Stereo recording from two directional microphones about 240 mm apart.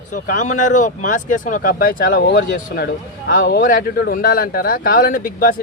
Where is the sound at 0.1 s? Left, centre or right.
Left.